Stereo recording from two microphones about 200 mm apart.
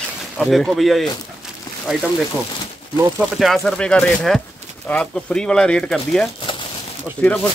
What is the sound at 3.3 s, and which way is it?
Speech, centre (ahead or behind).